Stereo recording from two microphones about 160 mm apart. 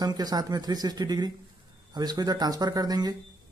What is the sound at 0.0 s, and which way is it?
Speech, 25° right (ahead or behind).